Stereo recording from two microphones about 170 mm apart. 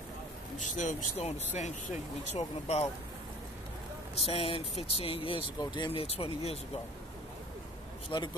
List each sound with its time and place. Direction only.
0.6 s speech: 45° left (ahead or behind)
4.2 s speech: 35° left (ahead or behind)
8.1 s speech: 30° left (ahead or behind)